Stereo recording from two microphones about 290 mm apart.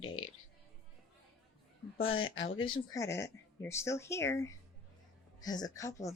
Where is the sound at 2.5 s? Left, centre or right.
Centre.